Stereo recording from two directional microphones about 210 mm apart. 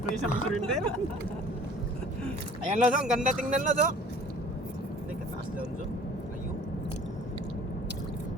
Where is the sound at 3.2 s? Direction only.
35° right (ahead or behind).